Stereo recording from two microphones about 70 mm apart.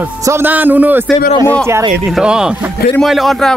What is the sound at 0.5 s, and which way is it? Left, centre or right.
Speech, right.